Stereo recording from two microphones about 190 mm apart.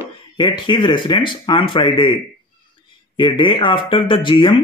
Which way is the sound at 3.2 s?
25° left (ahead or behind).